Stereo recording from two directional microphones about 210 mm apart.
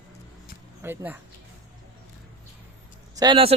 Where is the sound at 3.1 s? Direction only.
20° right (ahead or behind).